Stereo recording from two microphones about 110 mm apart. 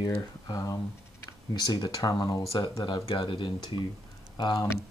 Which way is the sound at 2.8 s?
50° left (ahead or behind).